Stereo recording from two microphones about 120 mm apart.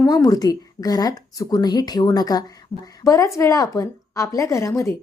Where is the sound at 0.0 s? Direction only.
30° left (ahead or behind).